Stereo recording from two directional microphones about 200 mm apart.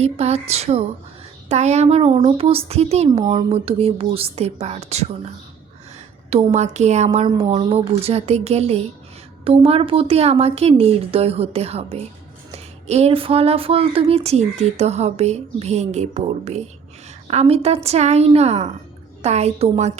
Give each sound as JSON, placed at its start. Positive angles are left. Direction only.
{"t": 0.0, "sound": "speech", "side_deg": -30}
{"t": 6.3, "sound": "a woman's voice", "side_deg": -35}